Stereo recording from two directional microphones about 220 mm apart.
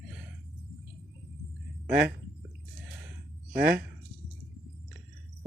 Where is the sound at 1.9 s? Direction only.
45° right (ahead or behind).